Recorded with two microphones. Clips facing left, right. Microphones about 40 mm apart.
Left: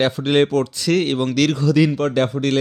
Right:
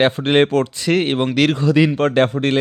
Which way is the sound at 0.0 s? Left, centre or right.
Right.